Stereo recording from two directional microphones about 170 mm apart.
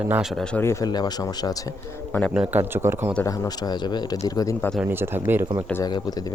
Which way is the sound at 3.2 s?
20° left (ahead or behind).